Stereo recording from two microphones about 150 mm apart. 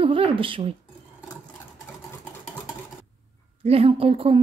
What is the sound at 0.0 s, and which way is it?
Speech, 35° right (ahead or behind).